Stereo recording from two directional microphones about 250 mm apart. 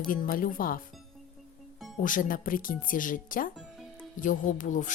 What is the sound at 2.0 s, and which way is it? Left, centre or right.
A woman's voice, left.